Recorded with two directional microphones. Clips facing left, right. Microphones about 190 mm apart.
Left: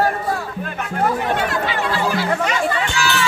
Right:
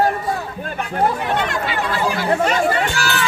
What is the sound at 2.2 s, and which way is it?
Chatter, 45° right (ahead or behind).